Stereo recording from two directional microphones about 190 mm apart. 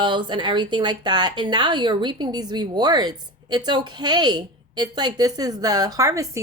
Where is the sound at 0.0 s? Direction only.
25° right (ahead or behind).